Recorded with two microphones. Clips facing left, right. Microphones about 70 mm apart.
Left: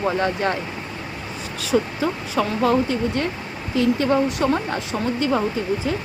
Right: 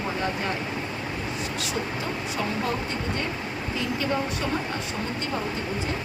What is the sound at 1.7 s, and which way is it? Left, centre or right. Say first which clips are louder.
Speech: left 13 dB; left.